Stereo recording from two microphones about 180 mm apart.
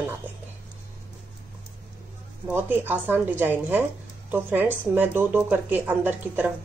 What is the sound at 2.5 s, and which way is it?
Speech, 10° right (ahead or behind).